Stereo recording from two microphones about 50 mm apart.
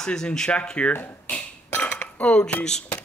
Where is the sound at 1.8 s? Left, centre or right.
Left.